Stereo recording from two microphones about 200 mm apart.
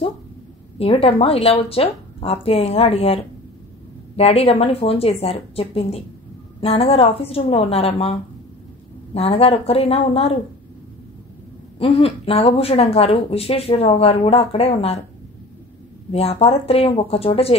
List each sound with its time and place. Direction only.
0.7 s speech: 30° left (ahead or behind)
11.8 s speech: 30° left (ahead or behind)
16.1 s speech: 30° left (ahead or behind)